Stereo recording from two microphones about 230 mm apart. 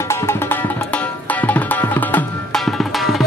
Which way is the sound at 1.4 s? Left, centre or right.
Centre.